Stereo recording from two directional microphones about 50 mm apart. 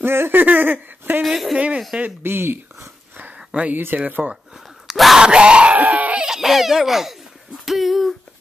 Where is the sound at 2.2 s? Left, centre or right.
Right.